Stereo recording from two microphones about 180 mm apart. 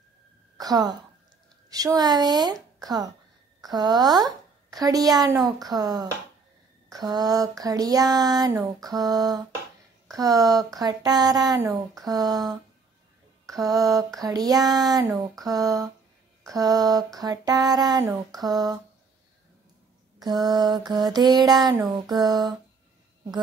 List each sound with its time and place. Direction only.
0.6 s a woman's voice: 20° right (ahead or behind)
20.2 s a woman's voice: 20° right (ahead or behind)